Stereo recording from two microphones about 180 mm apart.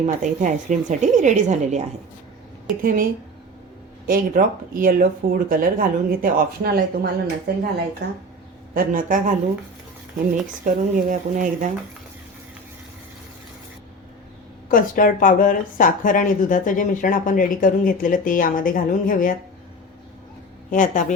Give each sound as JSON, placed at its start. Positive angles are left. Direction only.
{"t": 0.0, "sound": "speech", "side_deg": -45}
{"t": 2.8, "sound": "speech", "side_deg": -50}
{"t": 8.7, "sound": "speech", "side_deg": -50}
{"t": 10.7, "sound": "speech", "side_deg": -45}
{"t": 14.7, "sound": "speech", "side_deg": 50}
{"t": 20.7, "sound": "speech", "side_deg": 45}